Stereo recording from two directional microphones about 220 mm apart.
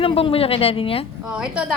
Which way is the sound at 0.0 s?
25° left (ahead or behind).